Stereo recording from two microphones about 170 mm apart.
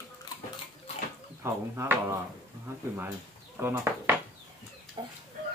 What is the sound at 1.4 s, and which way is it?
Speech, 15° right (ahead or behind).